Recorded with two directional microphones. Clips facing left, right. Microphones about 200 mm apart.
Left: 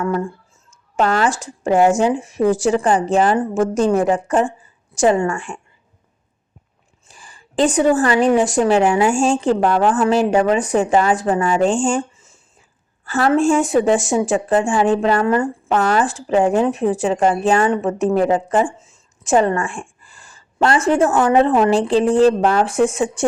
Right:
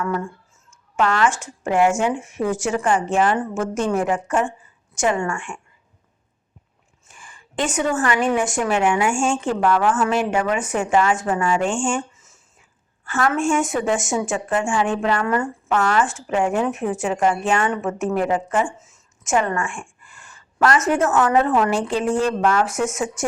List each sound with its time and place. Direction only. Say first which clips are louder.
0.0 s speech: left 4 dB; 30° left (ahead or behind)
7.1 s speech: left 1 dB; 35° left (ahead or behind)